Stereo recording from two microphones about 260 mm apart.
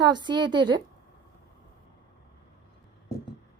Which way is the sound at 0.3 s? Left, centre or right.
Centre.